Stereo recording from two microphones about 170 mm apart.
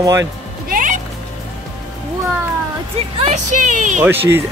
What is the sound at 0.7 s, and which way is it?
Music, 50° right (ahead or behind).